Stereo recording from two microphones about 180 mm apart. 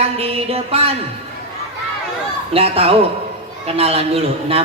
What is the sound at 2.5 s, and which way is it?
Music, 35° right (ahead or behind).